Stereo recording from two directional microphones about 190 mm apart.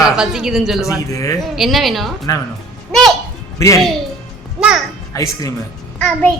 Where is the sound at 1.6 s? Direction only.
Centre (ahead or behind).